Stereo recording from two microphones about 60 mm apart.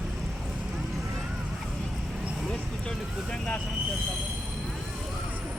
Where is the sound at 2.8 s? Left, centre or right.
Centre.